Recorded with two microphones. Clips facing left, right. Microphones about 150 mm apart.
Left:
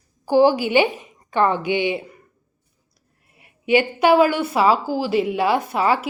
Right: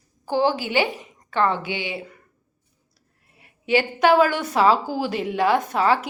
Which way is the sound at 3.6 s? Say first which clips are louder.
Left 2 dB; 15° left (ahead or behind).